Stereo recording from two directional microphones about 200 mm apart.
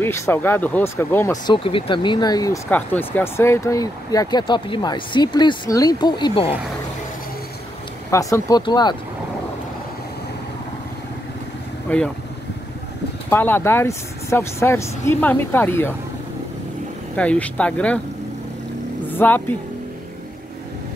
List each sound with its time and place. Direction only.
0.0 s speech: 10° left (ahead or behind)
8.1 s speech: 15° left (ahead or behind)
11.9 s speech: 10° left (ahead or behind)
13.3 s speech: 10° left (ahead or behind)
17.1 s speech: 5° left (ahead or behind)
19.0 s vehicle: 10° left (ahead or behind)